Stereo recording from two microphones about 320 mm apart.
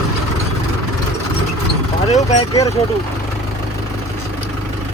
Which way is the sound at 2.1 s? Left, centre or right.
Centre.